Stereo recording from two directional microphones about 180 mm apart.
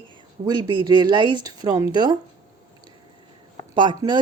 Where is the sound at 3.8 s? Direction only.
25° right (ahead or behind).